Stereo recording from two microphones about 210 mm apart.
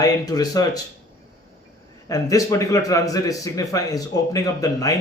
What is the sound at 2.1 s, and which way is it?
A man's voice, 15° left (ahead or behind).